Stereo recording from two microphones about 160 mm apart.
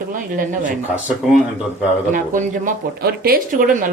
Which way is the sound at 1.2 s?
Centre (ahead or behind).